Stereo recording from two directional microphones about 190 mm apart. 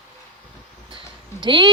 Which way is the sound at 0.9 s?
25° right (ahead or behind).